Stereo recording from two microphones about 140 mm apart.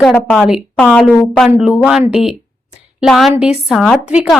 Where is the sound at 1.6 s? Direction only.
5° right (ahead or behind).